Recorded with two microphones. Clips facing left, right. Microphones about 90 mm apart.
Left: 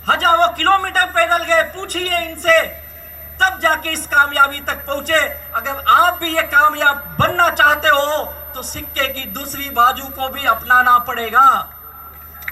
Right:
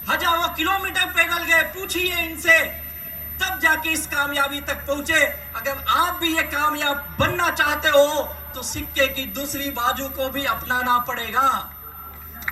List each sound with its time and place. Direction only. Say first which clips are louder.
0.0 s speech: left 8 dB; 50° left (ahead or behind)